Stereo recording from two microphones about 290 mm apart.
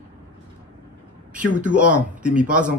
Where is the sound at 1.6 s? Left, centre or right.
Centre.